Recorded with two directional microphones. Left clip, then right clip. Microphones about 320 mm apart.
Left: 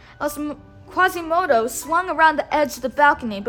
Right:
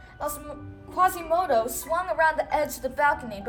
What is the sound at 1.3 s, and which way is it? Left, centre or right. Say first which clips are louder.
A woman's voice: left 5 dB; centre.